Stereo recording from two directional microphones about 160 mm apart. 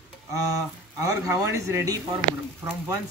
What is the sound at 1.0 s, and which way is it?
Speech, 20° right (ahead or behind).